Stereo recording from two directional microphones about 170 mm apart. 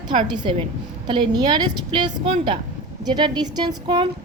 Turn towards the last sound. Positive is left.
turn(degrees=-30)  # may be behind; listen again after turning